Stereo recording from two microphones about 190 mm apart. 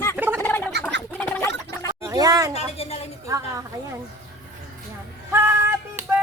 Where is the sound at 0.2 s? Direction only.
10° right (ahead or behind).